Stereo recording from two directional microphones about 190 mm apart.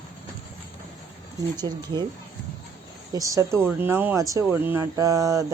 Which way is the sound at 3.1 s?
20° right (ahead or behind).